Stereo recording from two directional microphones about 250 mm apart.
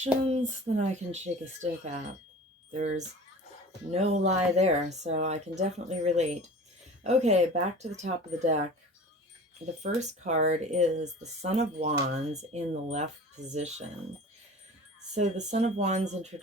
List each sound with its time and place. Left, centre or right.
0.0 s speech: right
2.7 s speech: right
9.8 s speech: right
15.1 s speech: right